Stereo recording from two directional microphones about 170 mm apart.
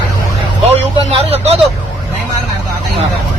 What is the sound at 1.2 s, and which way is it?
Vehicle, 35° right (ahead or behind).